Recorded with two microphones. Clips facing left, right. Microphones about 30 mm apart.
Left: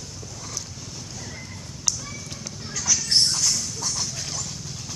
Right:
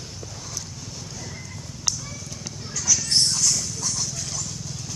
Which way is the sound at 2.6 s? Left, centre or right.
Centre.